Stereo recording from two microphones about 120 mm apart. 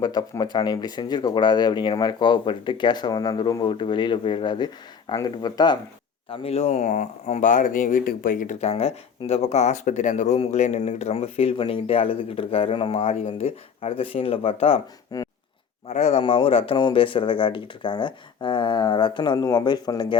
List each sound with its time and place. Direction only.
0.0 s speech: 35° left (ahead or behind)
6.2 s speech: 50° left (ahead or behind); by 8.7 s 90° left
8.7 s speech: 55° left (ahead or behind); by 10.4 s 85° left
10.4 s speech: 60° left (ahead or behind)
15.1 s a sound: 30° left (ahead or behind)
15.9 s speech: 70° left (ahead or behind)
16.2 s speech: 50° left (ahead or behind)